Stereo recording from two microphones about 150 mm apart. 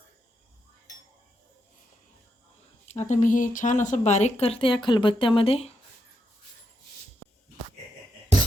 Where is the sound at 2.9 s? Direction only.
50° left (ahead or behind).